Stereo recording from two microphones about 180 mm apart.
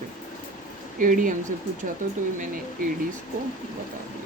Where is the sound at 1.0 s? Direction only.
50° right (ahead or behind).